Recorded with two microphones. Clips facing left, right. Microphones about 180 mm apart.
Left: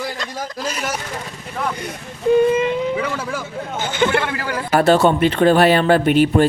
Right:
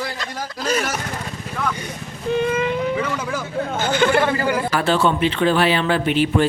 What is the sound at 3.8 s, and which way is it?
Speech, 20° left (ahead or behind).